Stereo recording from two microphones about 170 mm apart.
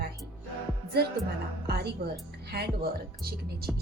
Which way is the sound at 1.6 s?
70° right (ahead or behind).